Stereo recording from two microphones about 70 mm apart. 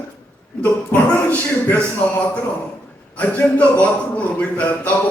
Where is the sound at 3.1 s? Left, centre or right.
Left.